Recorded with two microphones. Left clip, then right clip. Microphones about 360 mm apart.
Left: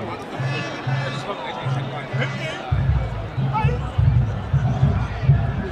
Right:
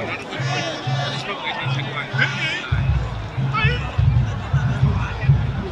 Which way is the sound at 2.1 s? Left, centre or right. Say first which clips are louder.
Right 7 dB; centre.